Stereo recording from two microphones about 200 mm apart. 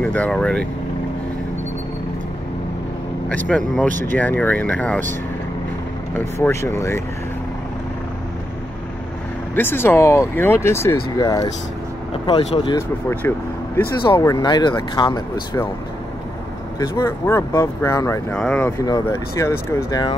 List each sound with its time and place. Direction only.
0.0 s speech: 5° left (ahead or behind)
3.3 s speech: 5° left (ahead or behind)
6.1 s speech: 10° left (ahead or behind)
9.6 s speech: 10° left (ahead or behind)
12.7 s speech: 10° left (ahead or behind)
14.2 s speech: 20° left (ahead or behind)
16.8 s speech: 15° left (ahead or behind)